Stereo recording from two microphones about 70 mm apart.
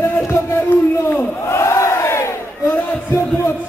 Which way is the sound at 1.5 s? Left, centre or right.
Left.